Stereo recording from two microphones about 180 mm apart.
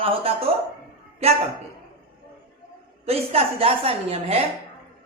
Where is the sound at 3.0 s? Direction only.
35° right (ahead or behind).